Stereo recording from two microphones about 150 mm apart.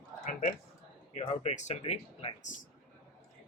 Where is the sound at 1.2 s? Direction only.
50° left (ahead or behind).